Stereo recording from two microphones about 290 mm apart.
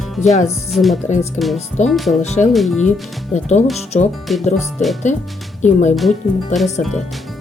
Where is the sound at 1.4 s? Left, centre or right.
Left.